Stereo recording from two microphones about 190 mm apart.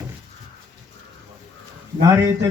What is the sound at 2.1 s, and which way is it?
Speech, 15° right (ahead or behind).